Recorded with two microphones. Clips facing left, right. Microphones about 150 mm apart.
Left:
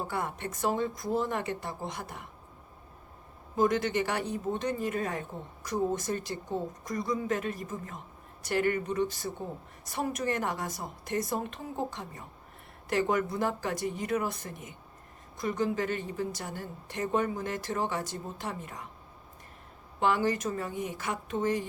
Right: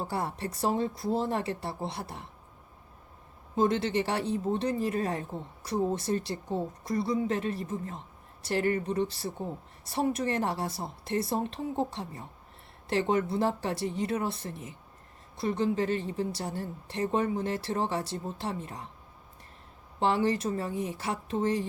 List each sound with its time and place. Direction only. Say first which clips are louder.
0.1 s speech: right 1 dB; 30° right (ahead or behind)
3.5 s speech: even; 30° right (ahead or behind)
20.0 s speech: right 1 dB; 30° right (ahead or behind)